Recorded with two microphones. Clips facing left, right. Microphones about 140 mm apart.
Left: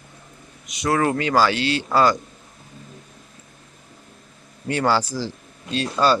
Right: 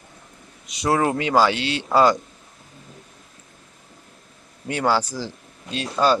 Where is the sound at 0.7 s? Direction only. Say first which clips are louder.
Right 1 dB; 30° right (ahead or behind).